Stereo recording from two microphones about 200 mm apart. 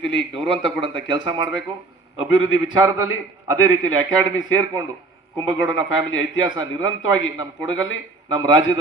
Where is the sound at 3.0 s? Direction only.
90° left.